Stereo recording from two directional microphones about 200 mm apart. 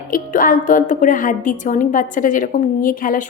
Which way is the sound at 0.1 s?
40° left (ahead or behind).